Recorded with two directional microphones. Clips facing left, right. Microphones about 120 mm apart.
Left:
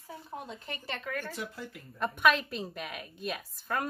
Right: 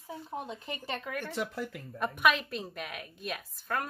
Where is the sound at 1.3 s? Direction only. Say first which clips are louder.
Right 5 dB; 80° right.